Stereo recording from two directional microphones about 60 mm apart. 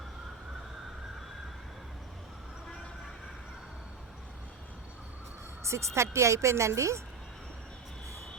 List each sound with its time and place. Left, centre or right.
5.6 s a woman's voice: right